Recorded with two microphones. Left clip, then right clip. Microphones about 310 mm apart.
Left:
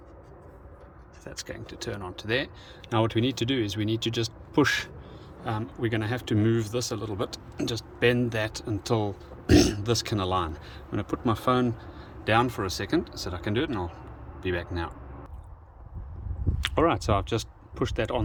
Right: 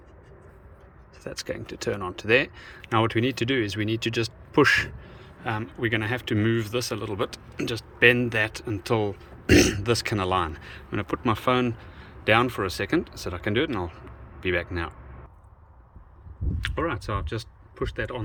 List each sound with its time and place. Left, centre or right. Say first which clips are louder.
1.2 s speech: right 6 dB; centre
16.7 s speech: left 6 dB; centre